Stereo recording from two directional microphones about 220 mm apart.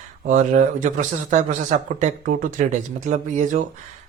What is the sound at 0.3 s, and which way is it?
Speech, 35° right (ahead or behind).